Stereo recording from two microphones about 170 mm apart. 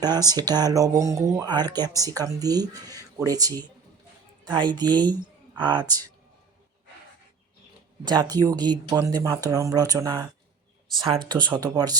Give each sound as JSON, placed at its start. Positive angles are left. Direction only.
{"t": 0.0, "sound": "speech", "side_deg": -25}
{"t": 8.0, "sound": "speech", "side_deg": -25}